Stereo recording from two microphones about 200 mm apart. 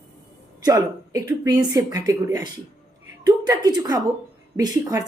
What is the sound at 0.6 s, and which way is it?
A woman's voice, 20° right (ahead or behind).